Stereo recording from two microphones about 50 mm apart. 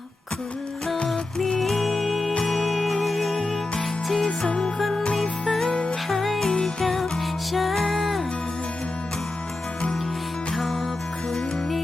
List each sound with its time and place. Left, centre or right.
1.0 s music: centre
4.3 s music: left
4.8 s music: centre
6.1 s music: centre
6.5 s music: centre
6.8 s music: centre
10.5 s music: centre